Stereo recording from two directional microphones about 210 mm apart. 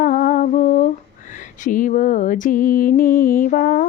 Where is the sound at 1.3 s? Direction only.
40° left (ahead or behind).